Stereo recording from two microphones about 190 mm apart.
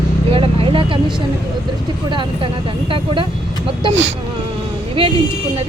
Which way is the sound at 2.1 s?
25° right (ahead or behind).